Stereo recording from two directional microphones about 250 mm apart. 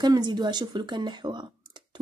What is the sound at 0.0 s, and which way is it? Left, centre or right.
A woman's voice, centre.